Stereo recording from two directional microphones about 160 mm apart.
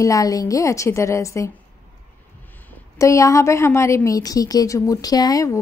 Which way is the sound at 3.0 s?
20° left (ahead or behind).